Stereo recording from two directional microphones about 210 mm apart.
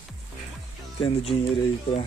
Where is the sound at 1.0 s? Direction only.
30° left (ahead or behind).